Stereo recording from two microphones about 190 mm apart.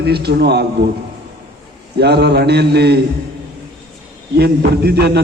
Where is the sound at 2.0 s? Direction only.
60° right (ahead or behind).